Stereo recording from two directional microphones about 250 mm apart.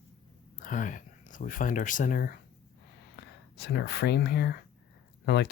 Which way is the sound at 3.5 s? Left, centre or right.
Left.